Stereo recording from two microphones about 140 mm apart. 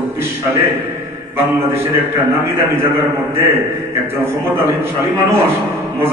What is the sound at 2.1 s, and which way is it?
A man's voice, 20° right (ahead or behind).